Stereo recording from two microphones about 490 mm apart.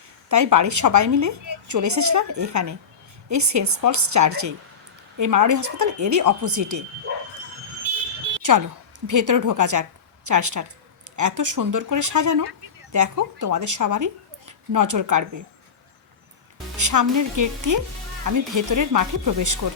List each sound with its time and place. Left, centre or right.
0.3 s a woman's voice: right
8.4 s a sound: right
9.0 s a woman's voice: right
16.7 s a woman's voice: right